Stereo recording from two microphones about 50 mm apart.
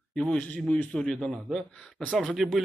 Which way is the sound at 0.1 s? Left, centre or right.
Centre.